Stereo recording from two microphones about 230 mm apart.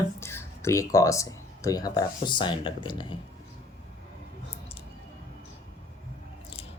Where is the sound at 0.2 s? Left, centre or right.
Centre.